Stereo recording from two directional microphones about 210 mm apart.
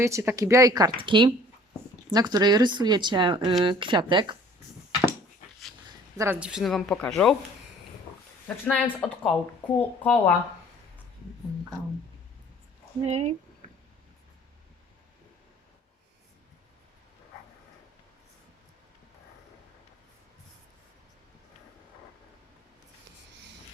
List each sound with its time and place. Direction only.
0.0 s speech: 15° right (ahead or behind)
6.1 s speech: 10° right (ahead or behind)
8.4 s speech: 5° left (ahead or behind)
13.1 s speech: 30° right (ahead or behind)